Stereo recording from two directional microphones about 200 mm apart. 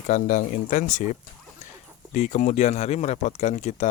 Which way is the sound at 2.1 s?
35° left (ahead or behind).